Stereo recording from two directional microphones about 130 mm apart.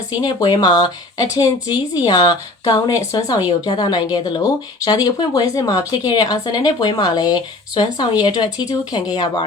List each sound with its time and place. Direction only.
0.2 s speech: 30° left (ahead or behind)